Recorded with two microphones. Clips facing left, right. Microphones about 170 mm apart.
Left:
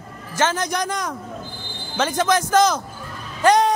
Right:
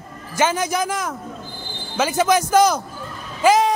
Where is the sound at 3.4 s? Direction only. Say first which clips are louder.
Even; centre (ahead or behind).